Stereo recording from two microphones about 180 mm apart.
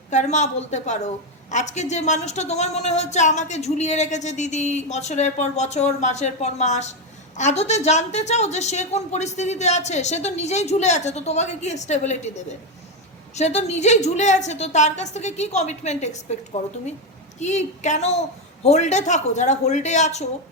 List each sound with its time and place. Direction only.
0.1 s a woman's voice: 40° left (ahead or behind)
17.4 s a woman's voice: 40° left (ahead or behind)